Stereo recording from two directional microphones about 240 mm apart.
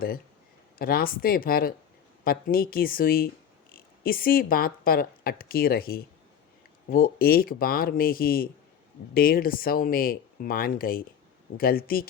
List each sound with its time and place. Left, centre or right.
0.8 s speech: left